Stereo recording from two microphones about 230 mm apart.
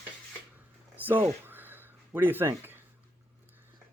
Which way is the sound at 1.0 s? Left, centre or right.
Centre.